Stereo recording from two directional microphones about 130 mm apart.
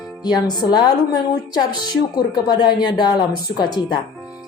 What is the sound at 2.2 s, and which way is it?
A woman's voice, 35° left (ahead or behind).